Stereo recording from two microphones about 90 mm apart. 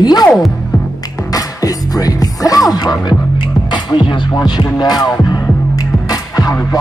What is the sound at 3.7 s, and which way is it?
Music, 60° left (ahead or behind).